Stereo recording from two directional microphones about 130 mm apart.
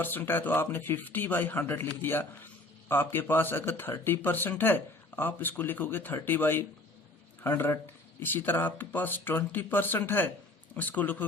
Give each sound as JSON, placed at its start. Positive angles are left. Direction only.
{"t": 0.0, "sound": "speech", "side_deg": 15}